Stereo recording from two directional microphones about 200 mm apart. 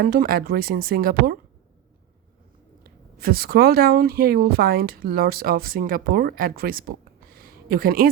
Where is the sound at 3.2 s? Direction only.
50° right (ahead or behind).